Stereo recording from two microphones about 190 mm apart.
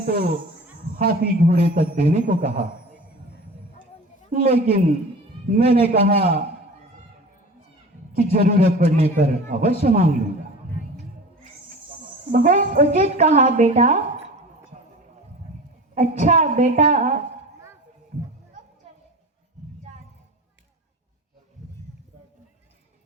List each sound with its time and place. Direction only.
0.0 s a woman's voice: 50° right (ahead or behind)
4.3 s a man's voice: 50° right (ahead or behind)
8.1 s a woman's voice: 45° right (ahead or behind)
12.3 s a woman's voice: 45° right (ahead or behind)
16.0 s a woman's voice: 45° right (ahead or behind)